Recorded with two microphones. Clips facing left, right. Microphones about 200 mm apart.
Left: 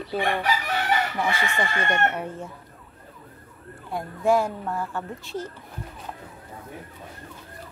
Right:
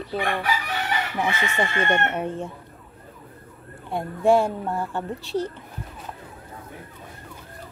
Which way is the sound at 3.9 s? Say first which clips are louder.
Right 3 dB; 30° right (ahead or behind).